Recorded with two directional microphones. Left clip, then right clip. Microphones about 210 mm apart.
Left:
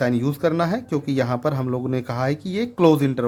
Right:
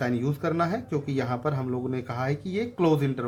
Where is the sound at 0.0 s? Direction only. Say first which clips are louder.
Left 7 dB; 50° left (ahead or behind).